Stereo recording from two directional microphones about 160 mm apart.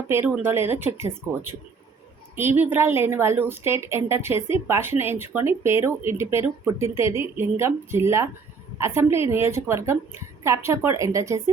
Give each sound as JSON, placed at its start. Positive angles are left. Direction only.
{"t": 0.1, "sound": "speech", "side_deg": -15}